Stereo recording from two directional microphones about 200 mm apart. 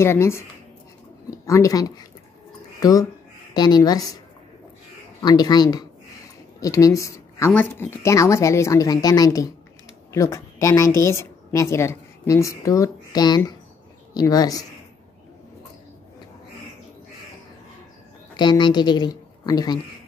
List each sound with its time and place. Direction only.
0.0 s a woman's voice: 15° left (ahead or behind)
5.2 s a woman's voice: 20° left (ahead or behind)
18.3 s a woman's voice: 20° left (ahead or behind)